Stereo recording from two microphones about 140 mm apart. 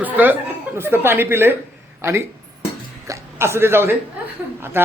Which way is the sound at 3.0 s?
20° right (ahead or behind).